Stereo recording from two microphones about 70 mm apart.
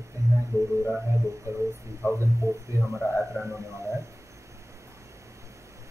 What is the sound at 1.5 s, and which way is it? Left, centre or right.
Speech, right.